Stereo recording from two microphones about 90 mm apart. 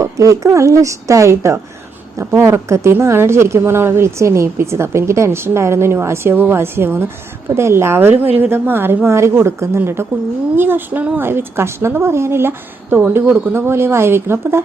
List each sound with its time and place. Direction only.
0.0 s a woman's voice: 35° right (ahead or behind)